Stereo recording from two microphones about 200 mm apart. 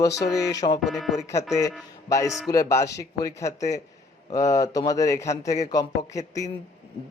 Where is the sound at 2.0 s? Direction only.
15° left (ahead or behind).